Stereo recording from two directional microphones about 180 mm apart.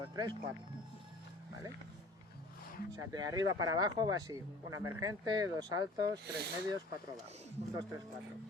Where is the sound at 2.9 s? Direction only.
20° right (ahead or behind).